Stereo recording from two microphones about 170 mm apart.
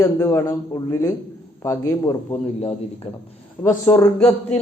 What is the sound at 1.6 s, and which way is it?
Speech, 15° left (ahead or behind).